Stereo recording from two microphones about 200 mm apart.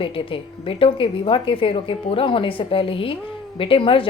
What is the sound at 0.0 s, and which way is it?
A woman's voice, 25° left (ahead or behind).